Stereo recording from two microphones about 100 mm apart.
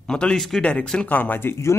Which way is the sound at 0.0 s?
10° left (ahead or behind).